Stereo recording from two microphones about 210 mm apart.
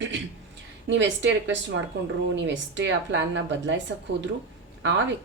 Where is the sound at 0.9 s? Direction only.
60° right (ahead or behind).